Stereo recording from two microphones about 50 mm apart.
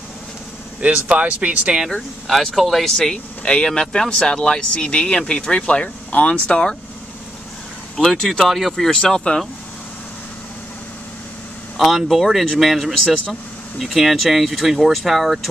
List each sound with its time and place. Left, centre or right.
1.1 s speech: right
1.9 s speech: centre
8.0 s speech: centre
9.0 s speech: centre
11.9 s speech: centre
13.9 s speech: centre